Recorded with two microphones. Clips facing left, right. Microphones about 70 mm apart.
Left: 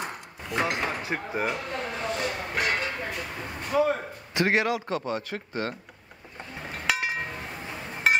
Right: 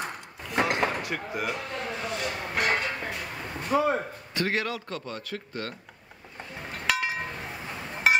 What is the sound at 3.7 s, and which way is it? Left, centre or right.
Speech, right.